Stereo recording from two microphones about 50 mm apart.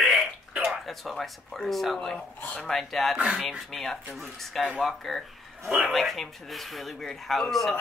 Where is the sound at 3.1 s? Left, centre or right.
Right.